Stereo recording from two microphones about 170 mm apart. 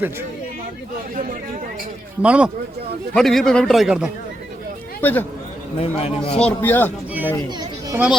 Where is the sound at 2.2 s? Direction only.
5° right (ahead or behind).